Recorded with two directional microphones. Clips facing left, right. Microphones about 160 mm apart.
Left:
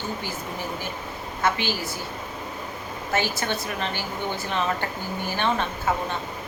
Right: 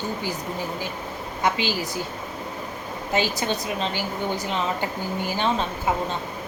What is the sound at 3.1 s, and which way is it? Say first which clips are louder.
A woman's voice: right 2 dB; 15° right (ahead or behind).